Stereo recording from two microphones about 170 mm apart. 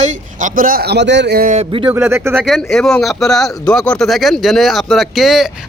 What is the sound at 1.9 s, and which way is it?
Speech, 15° right (ahead or behind).